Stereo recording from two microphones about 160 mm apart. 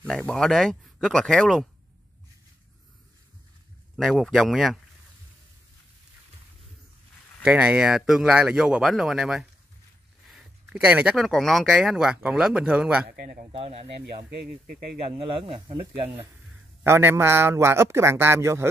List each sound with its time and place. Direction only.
0.0 s speech: 5° left (ahead or behind)
3.9 s speech: centre (ahead or behind)
7.4 s speech: 5° right (ahead or behind)
13.1 s a man's voice: 75° right (ahead or behind)
13.5 s speech: 40° right (ahead or behind)
16.8 s a man's voice: 15° right (ahead or behind)